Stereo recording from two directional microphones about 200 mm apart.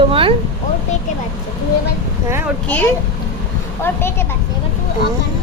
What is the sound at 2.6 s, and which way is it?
Speech, 10° left (ahead or behind).